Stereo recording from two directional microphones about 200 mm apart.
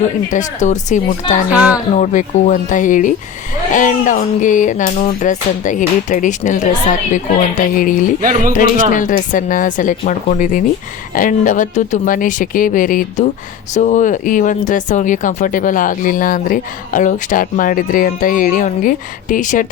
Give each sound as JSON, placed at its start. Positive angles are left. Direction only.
{"t": 0.3, "sound": "speech", "side_deg": 35}
{"t": 1.5, "sound": "a woman's voice", "side_deg": -5}
{"t": 2.0, "sound": "speech", "side_deg": 40}
{"t": 8.2, "sound": "speech", "side_deg": -45}
{"t": 8.5, "sound": "speech", "side_deg": 40}